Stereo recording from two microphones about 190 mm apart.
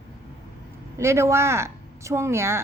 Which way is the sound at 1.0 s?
15° right (ahead or behind).